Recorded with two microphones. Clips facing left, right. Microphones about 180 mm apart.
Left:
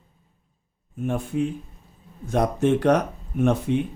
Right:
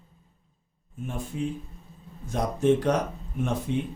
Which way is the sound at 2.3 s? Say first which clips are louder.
Left 2 dB; 65° left (ahead or behind).